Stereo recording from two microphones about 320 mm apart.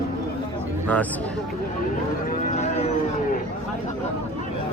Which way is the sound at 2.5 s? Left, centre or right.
Left.